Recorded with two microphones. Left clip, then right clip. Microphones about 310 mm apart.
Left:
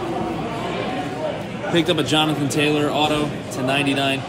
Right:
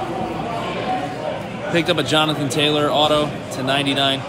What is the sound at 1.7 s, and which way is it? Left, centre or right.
Speech, centre.